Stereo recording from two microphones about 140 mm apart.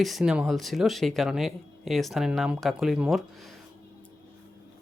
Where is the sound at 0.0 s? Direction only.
Centre (ahead or behind).